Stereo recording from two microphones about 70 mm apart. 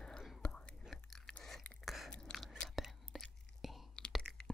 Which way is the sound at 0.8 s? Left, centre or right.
Centre.